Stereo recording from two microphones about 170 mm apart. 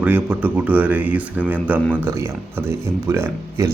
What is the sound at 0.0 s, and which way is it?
Speech, 10° right (ahead or behind).